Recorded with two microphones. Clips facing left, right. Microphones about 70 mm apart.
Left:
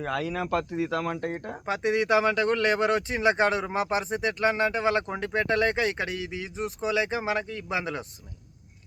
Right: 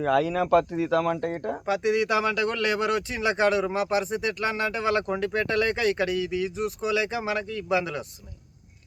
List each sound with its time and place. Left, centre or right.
0.0 s speech: centre
1.6 s speech: left